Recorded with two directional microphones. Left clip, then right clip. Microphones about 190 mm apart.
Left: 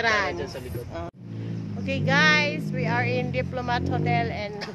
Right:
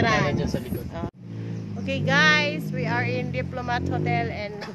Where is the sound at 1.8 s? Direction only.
10° right (ahead or behind); by 4.3 s 10° left (ahead or behind).